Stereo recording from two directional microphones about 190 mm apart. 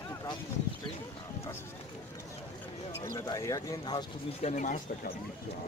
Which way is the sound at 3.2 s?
15° left (ahead or behind).